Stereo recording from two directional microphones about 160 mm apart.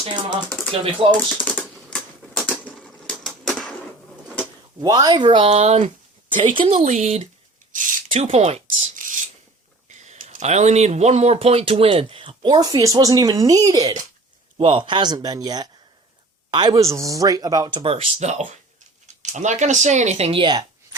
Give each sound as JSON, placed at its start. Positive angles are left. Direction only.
{"t": 0.0, "sound": "speech", "side_deg": -25}
{"t": 1.1, "sound": "typewriter", "side_deg": 10}
{"t": 4.8, "sound": "speech", "side_deg": -25}
{"t": 6.3, "sound": "speech", "side_deg": -30}
{"t": 6.7, "sound": "speech", "side_deg": -50}
{"t": 8.8, "sound": "a sound", "side_deg": -50}
{"t": 10.1, "sound": "speech", "side_deg": -45}